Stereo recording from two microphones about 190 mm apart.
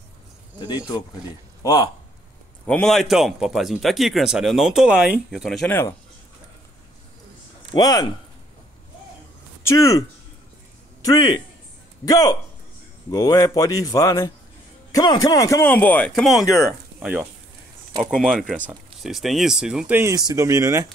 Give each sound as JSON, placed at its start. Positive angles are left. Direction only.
{"t": 0.6, "sound": "speech", "side_deg": 20}
{"t": 2.6, "sound": "a man's voice", "side_deg": 5}
{"t": 5.7, "sound": "speech", "side_deg": 15}
{"t": 7.7, "sound": "speech", "side_deg": 20}
{"t": 9.7, "sound": "a man's voice", "side_deg": 15}